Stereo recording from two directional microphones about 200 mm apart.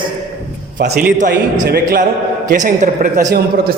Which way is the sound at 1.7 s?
50° right (ahead or behind).